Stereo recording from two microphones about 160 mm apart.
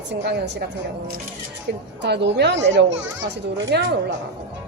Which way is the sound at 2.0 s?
90° right.